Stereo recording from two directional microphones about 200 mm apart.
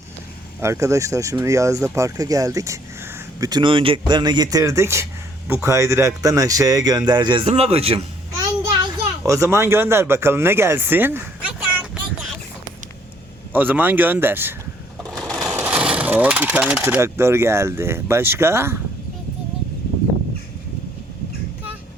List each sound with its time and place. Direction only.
0.6 s speech: 15° right (ahead or behind)
9.2 s speech: 15° right (ahead or behind)
13.5 s speech: 10° right (ahead or behind)
15.0 s speech: 5° left (ahead or behind)